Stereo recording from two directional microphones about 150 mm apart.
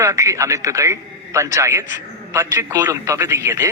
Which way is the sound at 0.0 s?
20° right (ahead or behind).